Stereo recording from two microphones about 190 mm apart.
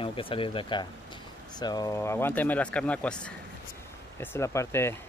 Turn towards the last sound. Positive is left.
turn(degrees=15)  # may be behind; listen again after turning